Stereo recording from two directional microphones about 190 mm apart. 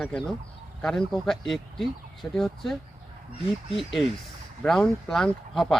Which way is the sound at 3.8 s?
Centre (ahead or behind).